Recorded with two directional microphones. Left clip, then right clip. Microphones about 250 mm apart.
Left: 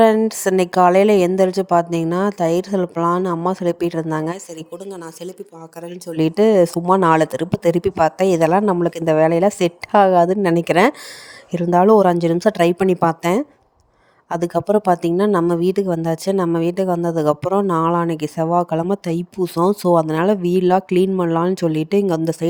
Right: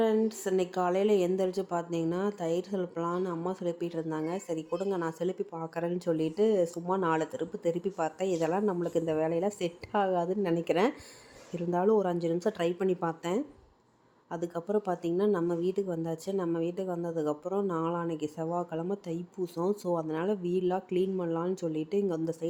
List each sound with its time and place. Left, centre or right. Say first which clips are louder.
0.0 s speech: left 14 dB; left
4.9 s speech: right 2 dB; centre
6.1 s speech: left 15 dB; left